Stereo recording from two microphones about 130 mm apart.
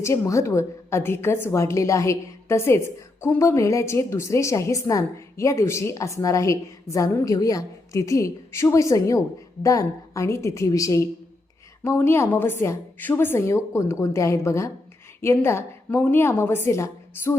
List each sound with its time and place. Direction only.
0.0 s a woman's voice: 25° left (ahead or behind)